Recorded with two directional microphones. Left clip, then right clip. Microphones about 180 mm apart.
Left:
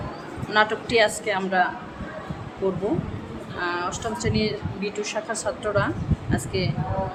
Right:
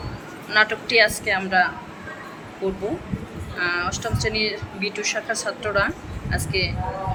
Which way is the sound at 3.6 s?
15° left (ahead or behind).